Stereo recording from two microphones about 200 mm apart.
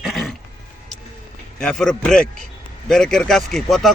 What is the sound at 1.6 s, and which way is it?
Speech, 5° left (ahead or behind).